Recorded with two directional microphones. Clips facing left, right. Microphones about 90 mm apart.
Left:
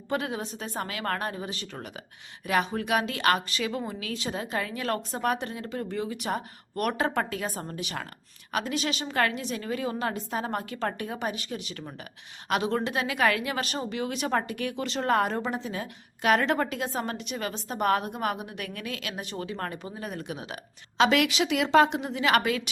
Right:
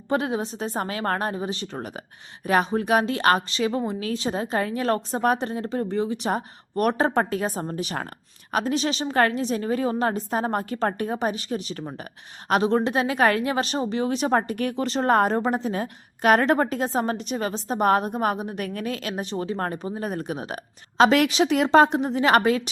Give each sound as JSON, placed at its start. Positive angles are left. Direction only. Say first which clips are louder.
{"t": 0.1, "sound": "a woman's voice", "louder": "right 6 dB", "side_deg": -30}